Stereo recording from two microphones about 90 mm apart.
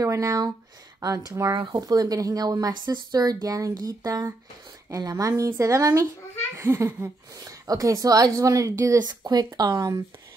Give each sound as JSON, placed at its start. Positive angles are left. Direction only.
{"t": 0.0, "sound": "speech", "side_deg": -35}
{"t": 1.6, "sound": "speech", "side_deg": -50}